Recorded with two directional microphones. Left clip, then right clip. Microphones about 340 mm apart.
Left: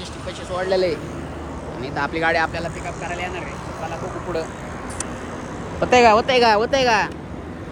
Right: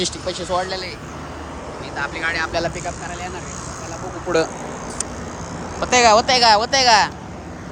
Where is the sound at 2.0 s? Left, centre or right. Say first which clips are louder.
Left 3 dB; centre.